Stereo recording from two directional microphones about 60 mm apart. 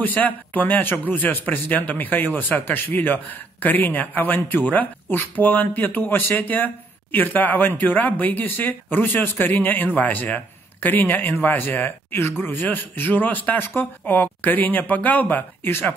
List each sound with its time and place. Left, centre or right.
0.0 s speech: left